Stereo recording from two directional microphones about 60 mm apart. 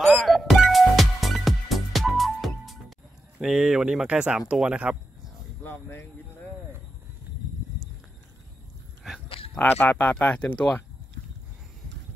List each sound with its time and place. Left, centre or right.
0.0 s music: centre
3.3 s speech: centre
5.6 s speech: left
9.7 s speech: left